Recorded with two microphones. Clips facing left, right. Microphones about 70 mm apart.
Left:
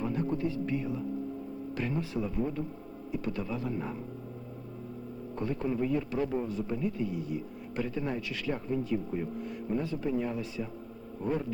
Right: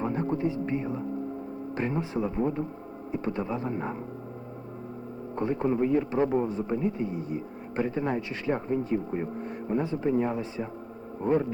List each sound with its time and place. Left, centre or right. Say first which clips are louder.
0.0 s a man's voice: right 3 dB; right
5.4 s a man's voice: right 5 dB; right